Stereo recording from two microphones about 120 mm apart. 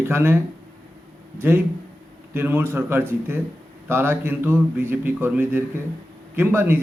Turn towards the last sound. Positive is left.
turn(degrees=-20)  # may be behind; listen again after turning